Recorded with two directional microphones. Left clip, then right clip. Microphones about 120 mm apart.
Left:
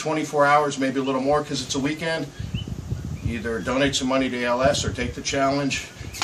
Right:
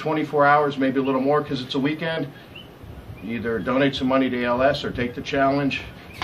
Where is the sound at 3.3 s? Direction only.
25° left (ahead or behind).